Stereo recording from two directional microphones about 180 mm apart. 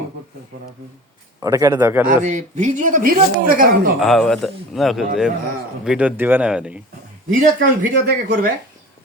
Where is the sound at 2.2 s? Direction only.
40° right (ahead or behind).